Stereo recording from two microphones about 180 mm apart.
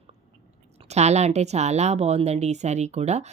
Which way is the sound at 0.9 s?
40° right (ahead or behind).